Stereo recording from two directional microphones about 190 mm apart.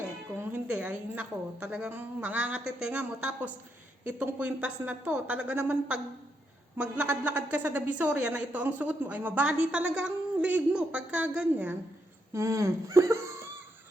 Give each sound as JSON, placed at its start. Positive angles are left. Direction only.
{"t": 0.3, "sound": "a woman's voice", "side_deg": -10}